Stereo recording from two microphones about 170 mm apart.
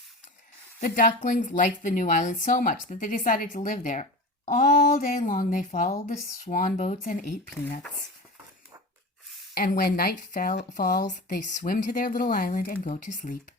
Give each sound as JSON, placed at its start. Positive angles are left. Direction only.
{"t": 0.8, "sound": "speech", "side_deg": 55}
{"t": 9.6, "sound": "speech", "side_deg": 60}
{"t": 12.8, "sound": "speech", "side_deg": 45}